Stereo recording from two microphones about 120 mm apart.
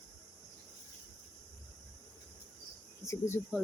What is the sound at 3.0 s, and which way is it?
Speech, 20° left (ahead or behind).